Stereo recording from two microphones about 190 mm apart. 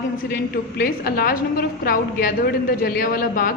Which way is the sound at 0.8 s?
50° left (ahead or behind).